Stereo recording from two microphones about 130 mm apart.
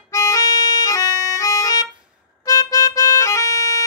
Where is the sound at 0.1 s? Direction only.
25° left (ahead or behind).